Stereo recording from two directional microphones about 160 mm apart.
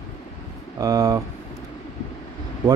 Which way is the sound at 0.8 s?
20° right (ahead or behind).